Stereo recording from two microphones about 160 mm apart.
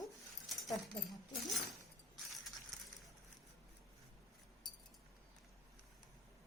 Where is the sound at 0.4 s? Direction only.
Centre (ahead or behind).